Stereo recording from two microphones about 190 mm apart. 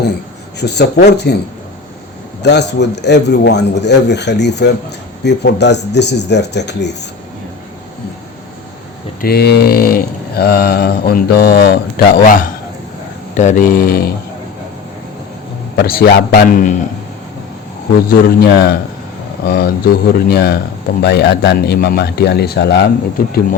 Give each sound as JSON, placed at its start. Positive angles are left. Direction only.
{"t": 0.6, "sound": "speech", "side_deg": 60}
{"t": 2.4, "sound": "speech", "side_deg": 65}
{"t": 9.2, "sound": "speech", "side_deg": 55}
{"t": 13.3, "sound": "speech", "side_deg": 40}
{"t": 15.7, "sound": "speech", "side_deg": 55}
{"t": 18.1, "sound": "speech", "side_deg": 55}